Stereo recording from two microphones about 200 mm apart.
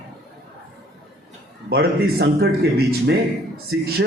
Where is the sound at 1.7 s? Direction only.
50° right (ahead or behind).